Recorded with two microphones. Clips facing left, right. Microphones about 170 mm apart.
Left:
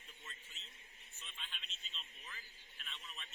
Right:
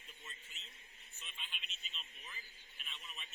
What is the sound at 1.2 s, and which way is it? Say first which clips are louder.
Vehicle: even; 10° right (ahead or behind).